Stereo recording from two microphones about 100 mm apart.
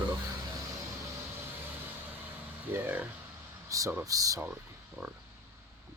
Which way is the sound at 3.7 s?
35° right (ahead or behind).